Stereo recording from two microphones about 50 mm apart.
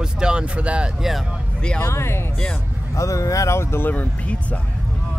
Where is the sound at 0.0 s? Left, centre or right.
Centre.